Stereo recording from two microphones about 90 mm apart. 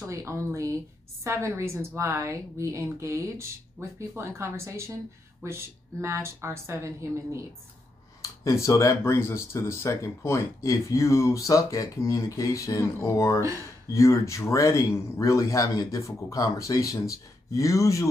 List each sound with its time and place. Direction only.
0.0 s a woman's voice: 30° right (ahead or behind)
8.2 s speech: 35° left (ahead or behind)